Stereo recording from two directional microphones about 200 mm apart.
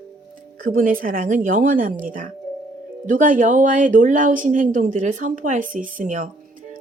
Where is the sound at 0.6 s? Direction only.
45° right (ahead or behind).